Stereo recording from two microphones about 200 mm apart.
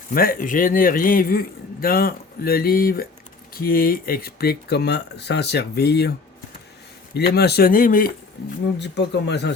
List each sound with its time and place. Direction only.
0.1 s a man's voice: 45° left (ahead or behind)
8.6 s speech: 60° left (ahead or behind)